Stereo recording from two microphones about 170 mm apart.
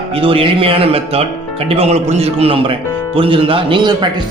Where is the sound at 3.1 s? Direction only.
30° right (ahead or behind).